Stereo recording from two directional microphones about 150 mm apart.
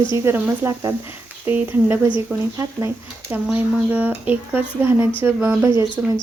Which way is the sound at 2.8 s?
15° right (ahead or behind).